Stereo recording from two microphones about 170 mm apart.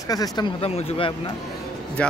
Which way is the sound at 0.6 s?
35° left (ahead or behind).